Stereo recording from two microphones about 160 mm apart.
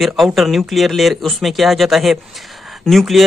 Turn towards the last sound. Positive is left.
turn(degrees=0)  # may be behind; listen again after turning